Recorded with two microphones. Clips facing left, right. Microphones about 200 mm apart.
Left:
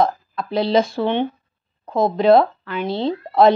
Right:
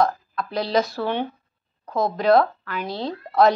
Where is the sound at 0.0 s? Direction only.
25° left (ahead or behind).